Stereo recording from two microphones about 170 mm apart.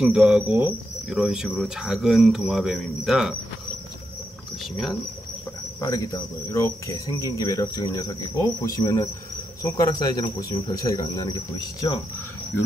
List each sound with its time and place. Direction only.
0.0 s speech: centre (ahead or behind)
5.8 s cricket: 20° left (ahead or behind)